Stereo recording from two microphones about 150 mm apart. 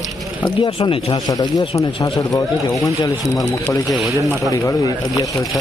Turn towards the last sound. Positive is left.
turn(degrees=25)  # may be behind; listen again after turning